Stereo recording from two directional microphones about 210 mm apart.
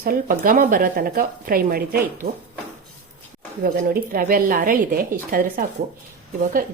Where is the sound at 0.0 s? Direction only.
40° right (ahead or behind).